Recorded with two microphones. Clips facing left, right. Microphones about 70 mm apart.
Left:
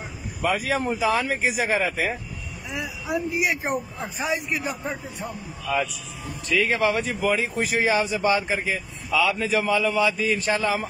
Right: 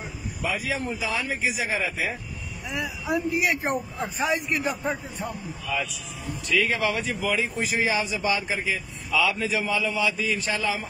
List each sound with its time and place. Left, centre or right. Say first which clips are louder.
0.4 s speech: left 5 dB; left
2.7 s a woman's voice: right 1 dB; centre
5.7 s speech: left 5 dB; left